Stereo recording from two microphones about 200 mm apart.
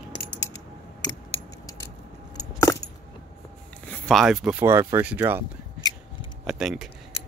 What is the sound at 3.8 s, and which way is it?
Speech, centre (ahead or behind).